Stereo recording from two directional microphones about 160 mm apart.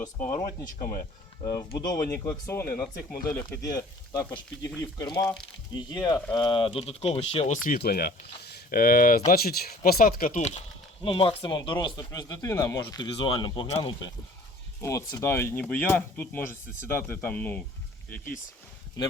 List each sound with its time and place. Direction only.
1.4 s speech: 30° left (ahead or behind)
7.6 s speech: 65° left (ahead or behind); by 10.6 s 45° left (ahead or behind)
11.0 s speech: 35° left (ahead or behind)
14.8 s speech: 20° left (ahead or behind)